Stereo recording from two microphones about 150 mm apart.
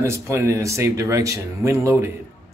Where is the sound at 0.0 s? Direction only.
20° right (ahead or behind).